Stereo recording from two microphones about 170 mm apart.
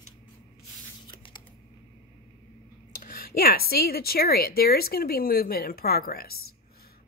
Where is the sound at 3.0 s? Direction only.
55° left (ahead or behind).